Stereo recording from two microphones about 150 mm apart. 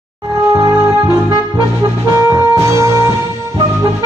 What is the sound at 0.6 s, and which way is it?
Music, 25° right (ahead or behind).